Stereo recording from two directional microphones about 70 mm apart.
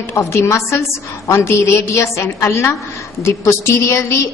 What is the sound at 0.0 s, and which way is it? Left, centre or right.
A woman's voice, left.